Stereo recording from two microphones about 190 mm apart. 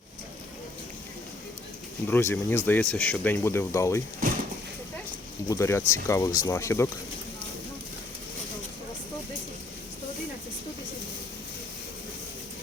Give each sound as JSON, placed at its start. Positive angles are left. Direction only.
{"t": 2.0, "sound": "speech", "side_deg": 10}
{"t": 4.2, "sound": "a sound", "side_deg": -45}
{"t": 5.5, "sound": "speech", "side_deg": 15}